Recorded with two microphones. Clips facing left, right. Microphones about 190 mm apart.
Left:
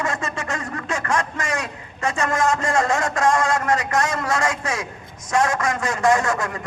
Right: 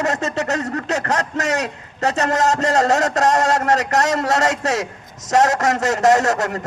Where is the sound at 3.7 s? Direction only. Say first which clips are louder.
Right 4 dB; 75° right (ahead or behind).